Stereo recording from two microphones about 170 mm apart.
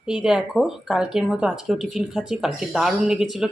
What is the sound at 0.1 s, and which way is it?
Speech, 5° right (ahead or behind).